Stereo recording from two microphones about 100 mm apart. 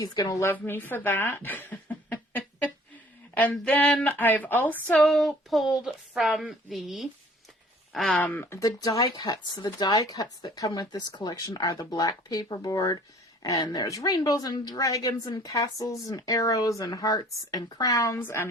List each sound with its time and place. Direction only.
0.0 s a woman's voice: 40° left (ahead or behind)
0.4 s speech: 20° left (ahead or behind)
3.3 s a sound: 15° left (ahead or behind)
7.9 s speech: 5° left (ahead or behind)
8.2 s speech: 20° left (ahead or behind)
9.0 s a woman's voice: 50° left (ahead or behind); by 18.2 s 35° left (ahead or behind)
18.2 s speech: 25° left (ahead or behind)